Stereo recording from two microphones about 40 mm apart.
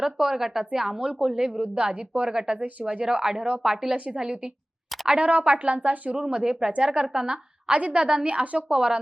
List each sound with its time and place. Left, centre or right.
0.0 s speech: centre
1.6 s speech: right
2.8 s a woman's voice: right
3.9 s speech: right
4.2 s a woman's voice: centre
5.1 s speech: right
6.1 s a woman's voice: centre
7.7 s a woman's voice: right